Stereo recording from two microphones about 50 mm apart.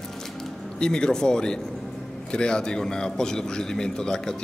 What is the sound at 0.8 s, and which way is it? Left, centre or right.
Speech, centre.